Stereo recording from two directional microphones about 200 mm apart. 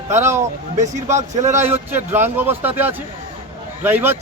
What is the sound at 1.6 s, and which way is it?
A man's voice, 10° right (ahead or behind).